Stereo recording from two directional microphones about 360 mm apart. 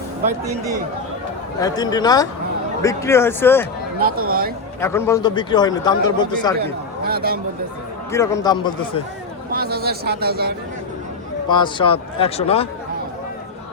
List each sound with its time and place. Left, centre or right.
1.6 s a man's voice: centre
4.0 s a man's voice: right
4.8 s a man's voice: centre
6.6 s speech: right
8.1 s a man's voice: centre
9.5 s a man's voice: right
11.4 s a man's voice: centre